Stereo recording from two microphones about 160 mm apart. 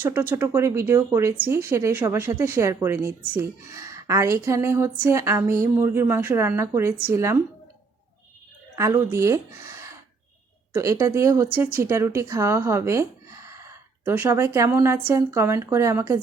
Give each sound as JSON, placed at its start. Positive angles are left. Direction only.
{"t": 0.0, "sound": "speech", "side_deg": -15}
{"t": 8.7, "sound": "speech", "side_deg": -15}